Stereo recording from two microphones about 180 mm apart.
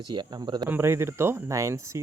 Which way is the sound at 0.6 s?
10° right (ahead or behind).